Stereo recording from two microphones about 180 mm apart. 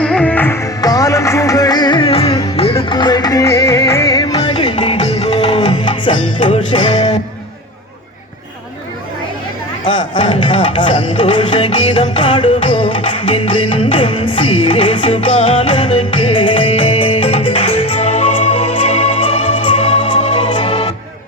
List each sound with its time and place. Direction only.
0.0 s music: 5° left (ahead or behind); by 6.1 s 25° left (ahead or behind)
6.4 s music: 40° left (ahead or behind)
9.9 s music: 25° left (ahead or behind)